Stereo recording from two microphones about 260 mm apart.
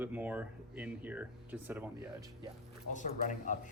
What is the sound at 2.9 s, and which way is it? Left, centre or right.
Speech, left.